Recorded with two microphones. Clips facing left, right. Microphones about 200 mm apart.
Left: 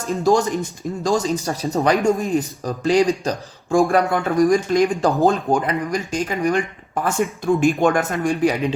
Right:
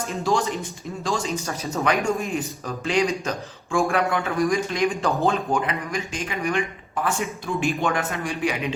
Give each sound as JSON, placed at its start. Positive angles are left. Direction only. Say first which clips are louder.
{"t": 0.2, "sound": "a man's voice", "louder": "left 6 dB", "side_deg": 40}